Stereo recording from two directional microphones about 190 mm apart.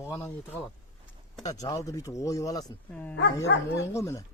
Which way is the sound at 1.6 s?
20° left (ahead or behind).